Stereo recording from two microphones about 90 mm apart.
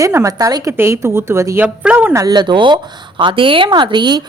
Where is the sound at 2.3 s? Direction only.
60° right (ahead or behind).